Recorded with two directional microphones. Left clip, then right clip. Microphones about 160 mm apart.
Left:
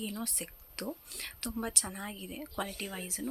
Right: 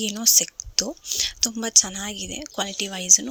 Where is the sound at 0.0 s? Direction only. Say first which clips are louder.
Right 18 dB; 40° right (ahead or behind).